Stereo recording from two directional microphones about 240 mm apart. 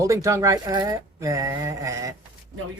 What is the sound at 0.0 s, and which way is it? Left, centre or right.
Speech, centre.